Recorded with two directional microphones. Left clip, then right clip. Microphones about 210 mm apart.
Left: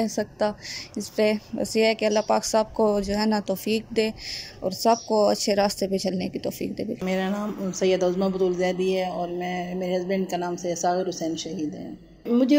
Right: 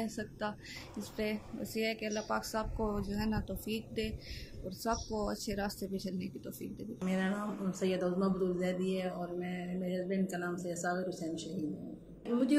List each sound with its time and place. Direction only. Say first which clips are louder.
0.0 s a woman's voice: left 14 dB; 30° left (ahead or behind)
7.1 s a man's voice: left 8 dB; 10° left (ahead or behind)